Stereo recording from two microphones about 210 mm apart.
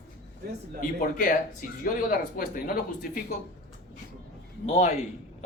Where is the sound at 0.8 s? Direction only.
40° left (ahead or behind).